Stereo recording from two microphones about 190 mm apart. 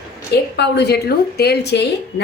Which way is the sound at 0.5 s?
65° left (ahead or behind).